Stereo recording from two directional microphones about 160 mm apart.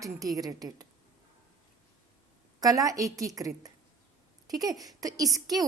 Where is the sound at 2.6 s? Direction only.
20° right (ahead or behind).